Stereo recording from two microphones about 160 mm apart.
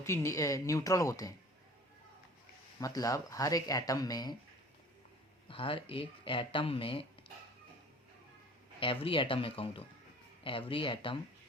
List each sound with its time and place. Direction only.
0.0 s speech: 15° left (ahead or behind)
2.8 s speech: 20° left (ahead or behind)
5.5 s speech: 35° left (ahead or behind)
8.8 s speech: 35° left (ahead or behind)